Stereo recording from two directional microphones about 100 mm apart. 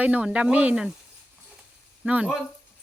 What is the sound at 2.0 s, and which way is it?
Speech, 15° right (ahead or behind).